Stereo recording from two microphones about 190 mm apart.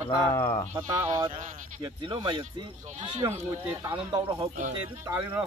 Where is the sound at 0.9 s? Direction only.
15° right (ahead or behind).